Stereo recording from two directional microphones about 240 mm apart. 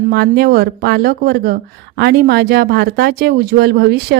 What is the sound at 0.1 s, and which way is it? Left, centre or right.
A woman's voice, right.